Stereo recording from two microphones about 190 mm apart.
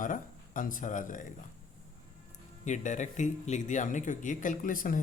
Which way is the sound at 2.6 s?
40° left (ahead or behind).